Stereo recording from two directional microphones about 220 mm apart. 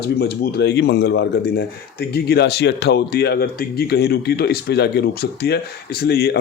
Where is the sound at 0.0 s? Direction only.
45° left (ahead or behind).